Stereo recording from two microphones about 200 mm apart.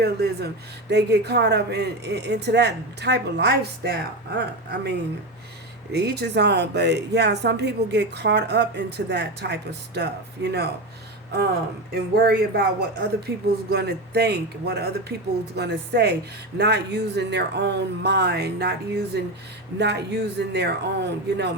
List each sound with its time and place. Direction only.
0.0 s speech: 55° right (ahead or behind)
11.9 s speech: 50° right (ahead or behind)